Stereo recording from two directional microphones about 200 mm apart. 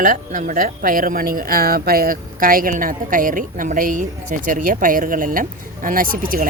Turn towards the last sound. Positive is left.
turn(degrees=-45)  # may be behind; listen again after turning